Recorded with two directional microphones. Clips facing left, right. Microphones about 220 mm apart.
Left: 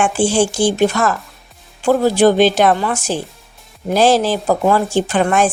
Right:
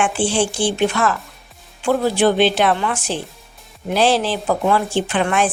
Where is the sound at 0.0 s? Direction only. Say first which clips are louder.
Left 4 dB; 45° left (ahead or behind).